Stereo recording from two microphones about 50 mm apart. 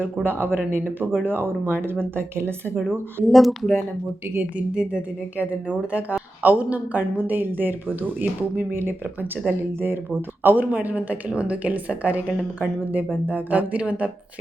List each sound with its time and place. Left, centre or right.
0.0 s speech: right
3.2 s speech: centre
4.5 s a woman's voice: right
8.7 s a woman's voice: right